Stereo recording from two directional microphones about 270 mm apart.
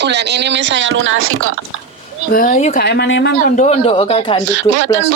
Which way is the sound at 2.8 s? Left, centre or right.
Left.